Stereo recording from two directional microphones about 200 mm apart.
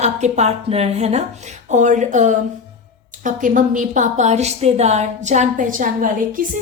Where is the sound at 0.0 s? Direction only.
35° right (ahead or behind).